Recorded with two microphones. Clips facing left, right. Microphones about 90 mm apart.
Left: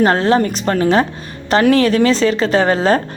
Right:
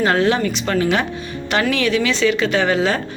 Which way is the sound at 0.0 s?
35° left (ahead or behind).